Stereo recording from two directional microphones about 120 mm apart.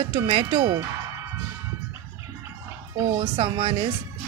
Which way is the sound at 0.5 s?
25° right (ahead or behind).